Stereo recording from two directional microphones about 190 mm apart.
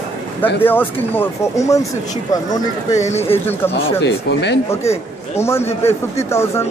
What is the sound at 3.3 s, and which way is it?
Speech, 10° left (ahead or behind).